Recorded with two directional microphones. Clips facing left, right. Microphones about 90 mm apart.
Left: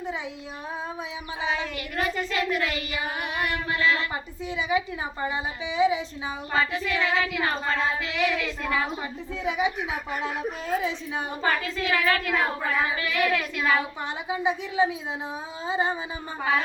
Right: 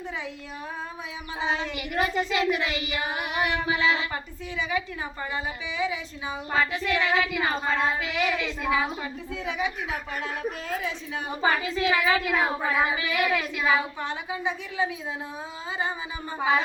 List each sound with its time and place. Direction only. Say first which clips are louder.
1.7 s child singing: right 2 dB; 10° right (ahead or behind)
4.1 s a woman's voice: left 2 dB; 15° left (ahead or behind)
6.5 s child singing: right 1 dB; centre (ahead or behind)
9.4 s a woman's voice: left 4 dB; 15° left (ahead or behind)
11.3 s child singing: right 3 dB; 10° right (ahead or behind)
14.0 s a woman's voice: left 2 dB; 20° left (ahead or behind)
16.4 s child singing: right 2 dB; 10° right (ahead or behind)